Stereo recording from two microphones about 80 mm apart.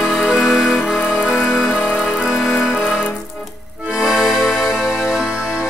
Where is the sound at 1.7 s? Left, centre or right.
Left.